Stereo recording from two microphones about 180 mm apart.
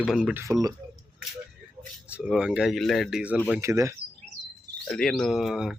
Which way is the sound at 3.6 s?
15° right (ahead or behind).